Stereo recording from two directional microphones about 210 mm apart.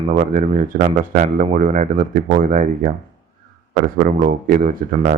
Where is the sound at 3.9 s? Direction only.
40° right (ahead or behind).